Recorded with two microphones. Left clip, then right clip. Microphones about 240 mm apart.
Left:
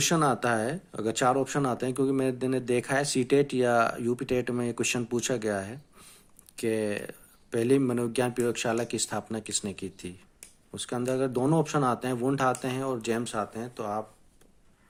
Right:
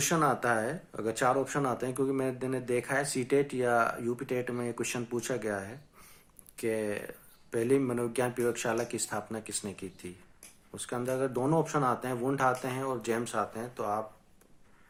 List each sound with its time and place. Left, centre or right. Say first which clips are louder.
0.1 s speech: left 2 dB; left
7.1 s a sound: left 3 dB; left
7.7 s speech: left 3 dB; left
9.5 s speech: left 5 dB; left
10.8 s speech: left 3 dB; left